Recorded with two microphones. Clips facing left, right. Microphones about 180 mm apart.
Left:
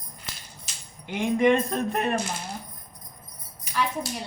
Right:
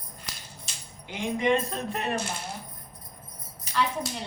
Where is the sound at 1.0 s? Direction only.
55° left (ahead or behind).